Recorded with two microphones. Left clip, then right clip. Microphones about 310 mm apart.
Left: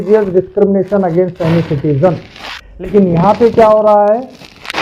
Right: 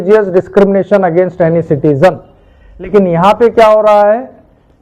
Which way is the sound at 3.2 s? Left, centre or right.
Right.